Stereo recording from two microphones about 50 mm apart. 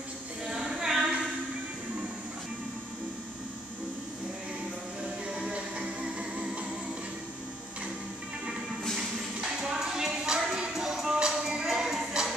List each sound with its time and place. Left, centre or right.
0.5 s a sound: centre
5.5 s music: centre
8.9 s music: centre